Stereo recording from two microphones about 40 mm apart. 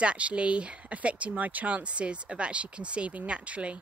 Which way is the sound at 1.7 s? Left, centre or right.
Right.